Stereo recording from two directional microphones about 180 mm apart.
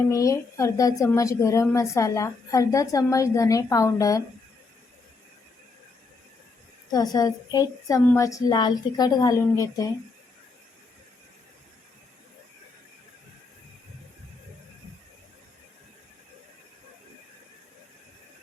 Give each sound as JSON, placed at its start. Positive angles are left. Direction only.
{"t": 0.1, "sound": "a woman's voice", "side_deg": 15}
{"t": 6.9, "sound": "a woman's voice", "side_deg": 20}